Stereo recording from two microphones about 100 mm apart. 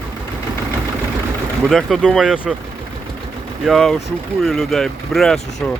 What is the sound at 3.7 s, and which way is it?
Speech, 5° left (ahead or behind).